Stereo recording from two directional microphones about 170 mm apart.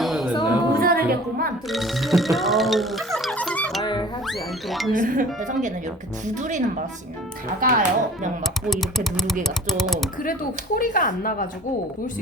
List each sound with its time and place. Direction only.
0.0 s music: centre (ahead or behind)
0.7 s music: 60° right (ahead or behind)
1.7 s speech: centre (ahead or behind)
4.3 s cat: centre (ahead or behind)
4.9 s speech: 50° right (ahead or behind)
8.7 s speech: centre (ahead or behind)
10.8 s speech: 55° left (ahead or behind)